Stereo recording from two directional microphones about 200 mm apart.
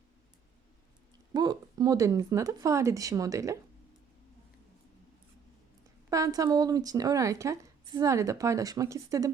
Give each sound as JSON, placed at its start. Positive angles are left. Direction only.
{"t": 1.3, "sound": "speech", "side_deg": -20}
{"t": 6.1, "sound": "speech", "side_deg": -15}